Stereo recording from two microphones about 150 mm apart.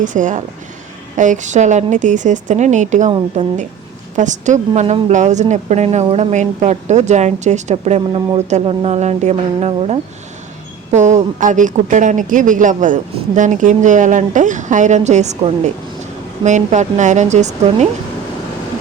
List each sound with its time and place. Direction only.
0.0 s speech: 55° right (ahead or behind)